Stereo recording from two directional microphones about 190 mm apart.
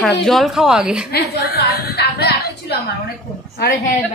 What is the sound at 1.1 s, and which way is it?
A woman's voice, 55° left (ahead or behind).